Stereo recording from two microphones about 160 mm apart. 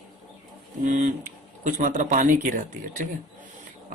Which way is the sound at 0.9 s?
50° right (ahead or behind).